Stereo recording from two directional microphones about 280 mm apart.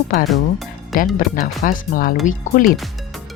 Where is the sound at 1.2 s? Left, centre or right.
Left.